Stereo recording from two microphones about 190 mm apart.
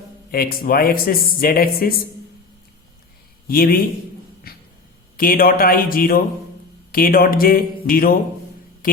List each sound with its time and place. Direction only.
0.3 s speech: 50° left (ahead or behind)
3.4 s a man's voice: 50° left (ahead or behind)
4.5 s a sound: 50° left (ahead or behind)
5.1 s speech: 50° left (ahead or behind)